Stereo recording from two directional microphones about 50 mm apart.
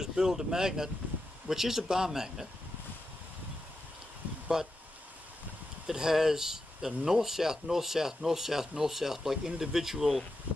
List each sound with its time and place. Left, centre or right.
0.0 s speech: centre
4.5 s speech: centre
5.9 s speech: centre